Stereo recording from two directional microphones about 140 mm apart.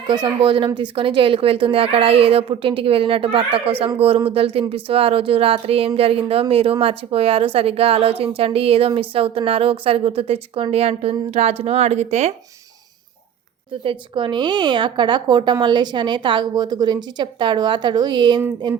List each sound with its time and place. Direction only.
0.1 s speech: 35° right (ahead or behind); by 12.3 s 50° right (ahead or behind)
13.8 s speech: 35° right (ahead or behind)